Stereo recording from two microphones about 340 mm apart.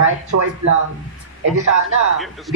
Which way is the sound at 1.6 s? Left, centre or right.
Right.